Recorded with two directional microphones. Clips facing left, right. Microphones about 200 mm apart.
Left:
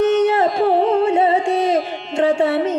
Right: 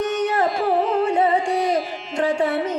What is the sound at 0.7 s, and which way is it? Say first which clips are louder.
Carnatic music: left 4 dB; 25° left (ahead or behind).